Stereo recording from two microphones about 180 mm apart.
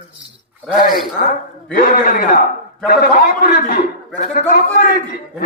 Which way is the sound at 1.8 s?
50° left (ahead or behind).